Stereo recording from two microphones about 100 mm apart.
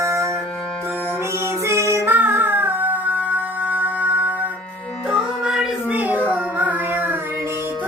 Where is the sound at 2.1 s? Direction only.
20° right (ahead or behind).